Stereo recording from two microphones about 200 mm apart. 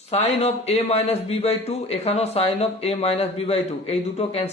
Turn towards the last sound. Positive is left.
turn(degrees=30)  # may be behind; listen again after turning